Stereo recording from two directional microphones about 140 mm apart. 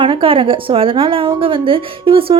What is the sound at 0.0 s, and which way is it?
A woman's voice, 40° right (ahead or behind).